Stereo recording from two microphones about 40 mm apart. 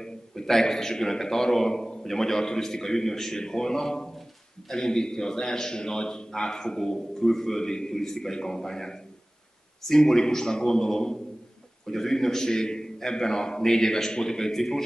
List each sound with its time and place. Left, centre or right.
0.3 s a man's voice: centre